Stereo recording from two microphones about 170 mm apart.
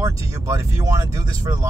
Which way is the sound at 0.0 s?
20° right (ahead or behind).